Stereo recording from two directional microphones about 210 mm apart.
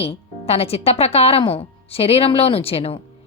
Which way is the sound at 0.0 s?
30° left (ahead or behind).